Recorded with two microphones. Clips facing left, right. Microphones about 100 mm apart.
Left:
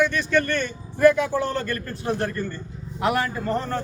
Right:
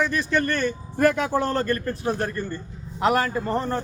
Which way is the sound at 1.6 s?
30° right (ahead or behind).